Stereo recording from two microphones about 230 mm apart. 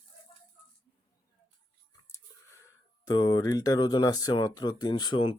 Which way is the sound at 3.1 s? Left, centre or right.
Centre.